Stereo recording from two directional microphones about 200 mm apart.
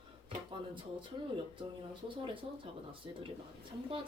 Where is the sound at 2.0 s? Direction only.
25° right (ahead or behind).